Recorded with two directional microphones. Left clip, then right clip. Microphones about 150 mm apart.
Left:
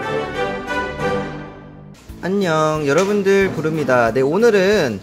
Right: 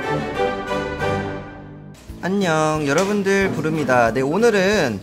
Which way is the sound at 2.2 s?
30° left (ahead or behind).